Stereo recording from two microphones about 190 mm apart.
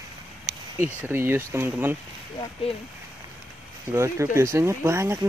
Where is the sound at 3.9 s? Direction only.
15° right (ahead or behind).